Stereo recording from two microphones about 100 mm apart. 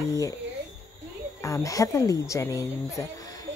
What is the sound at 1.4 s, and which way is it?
Speech, 35° left (ahead or behind).